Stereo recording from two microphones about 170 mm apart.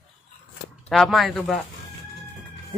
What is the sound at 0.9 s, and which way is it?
Speech, centre (ahead or behind).